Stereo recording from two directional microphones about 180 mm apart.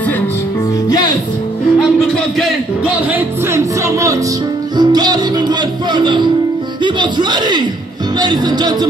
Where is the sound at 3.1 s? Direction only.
15° right (ahead or behind).